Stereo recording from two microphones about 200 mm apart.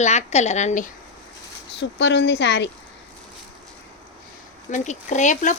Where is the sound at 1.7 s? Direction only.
60° left (ahead or behind).